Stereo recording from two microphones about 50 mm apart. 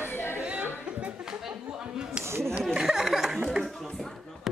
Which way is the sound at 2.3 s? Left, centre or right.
Right.